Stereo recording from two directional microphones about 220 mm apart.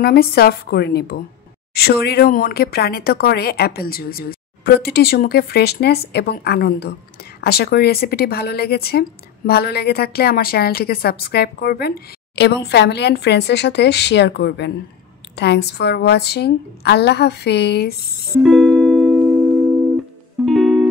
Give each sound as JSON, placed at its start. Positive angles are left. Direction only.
{"t": 0.0, "sound": "speech", "side_deg": 45}
{"t": 18.4, "sound": "music", "side_deg": 0}
{"t": 20.4, "sound": "music", "side_deg": 0}